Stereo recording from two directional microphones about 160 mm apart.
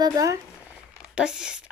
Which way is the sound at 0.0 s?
20° right (ahead or behind).